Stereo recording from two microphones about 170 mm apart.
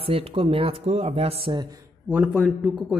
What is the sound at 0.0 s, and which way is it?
A man's voice, 35° right (ahead or behind).